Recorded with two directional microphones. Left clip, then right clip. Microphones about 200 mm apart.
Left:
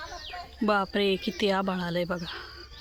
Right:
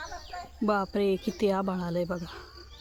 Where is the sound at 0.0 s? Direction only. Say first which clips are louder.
Left 1 dB; 45° left (ahead or behind).